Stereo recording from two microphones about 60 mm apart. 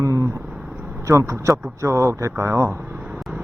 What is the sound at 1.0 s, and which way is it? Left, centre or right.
Speech, right.